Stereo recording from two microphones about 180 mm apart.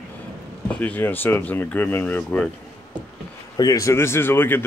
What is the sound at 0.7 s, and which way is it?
Speech, 10° left (ahead or behind).